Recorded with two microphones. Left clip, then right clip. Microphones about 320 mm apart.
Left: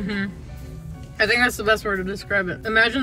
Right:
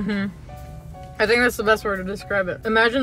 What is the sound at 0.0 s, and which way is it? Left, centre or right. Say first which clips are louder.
Speech: right 1 dB; centre.